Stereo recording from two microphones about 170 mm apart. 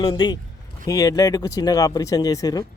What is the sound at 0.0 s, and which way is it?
Speech, 25° left (ahead or behind).